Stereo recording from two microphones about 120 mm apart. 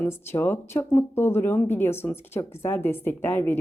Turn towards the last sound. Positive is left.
turn(degrees=20)  # may be behind; listen again after turning